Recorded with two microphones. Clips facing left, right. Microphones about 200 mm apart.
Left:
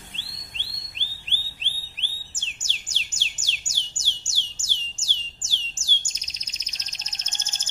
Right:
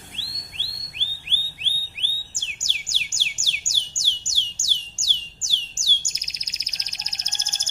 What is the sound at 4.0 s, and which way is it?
Music, 15° right (ahead or behind).